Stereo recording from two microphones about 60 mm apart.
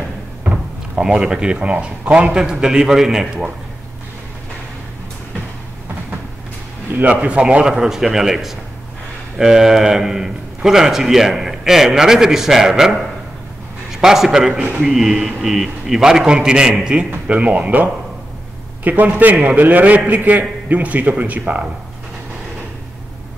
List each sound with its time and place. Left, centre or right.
0.4 s cupboard open or close: right
1.0 s a man's voice: centre
6.9 s a man's voice: right
7.7 s a man's voice: centre
14.0 s a man's voice: centre; by 21.6 s right